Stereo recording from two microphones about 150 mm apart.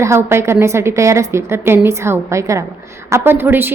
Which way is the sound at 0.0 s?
15° right (ahead or behind).